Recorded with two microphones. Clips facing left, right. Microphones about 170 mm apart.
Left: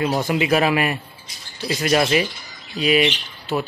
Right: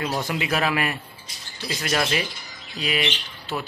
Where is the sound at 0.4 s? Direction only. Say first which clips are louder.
Left 6 dB; 15° left (ahead or behind).